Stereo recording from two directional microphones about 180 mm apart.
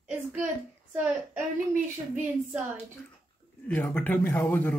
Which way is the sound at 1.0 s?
5° right (ahead or behind).